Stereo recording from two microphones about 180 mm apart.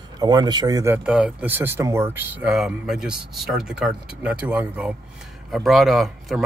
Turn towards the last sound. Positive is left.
turn(degrees=0)  # may be behind; listen again after turning